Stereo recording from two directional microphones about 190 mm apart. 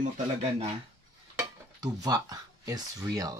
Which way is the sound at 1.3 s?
20° right (ahead or behind).